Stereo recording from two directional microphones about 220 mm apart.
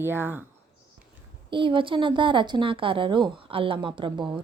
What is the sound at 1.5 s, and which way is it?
Speech, 20° right (ahead or behind).